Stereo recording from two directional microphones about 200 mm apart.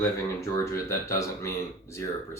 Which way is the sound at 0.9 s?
15° left (ahead or behind).